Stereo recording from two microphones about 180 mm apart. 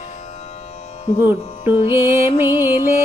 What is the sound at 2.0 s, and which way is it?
Music, 15° right (ahead or behind).